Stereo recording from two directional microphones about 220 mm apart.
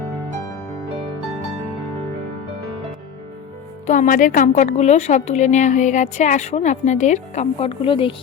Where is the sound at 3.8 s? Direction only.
35° left (ahead or behind).